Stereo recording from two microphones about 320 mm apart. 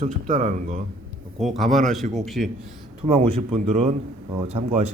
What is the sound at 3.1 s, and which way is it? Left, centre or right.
Speech, centre.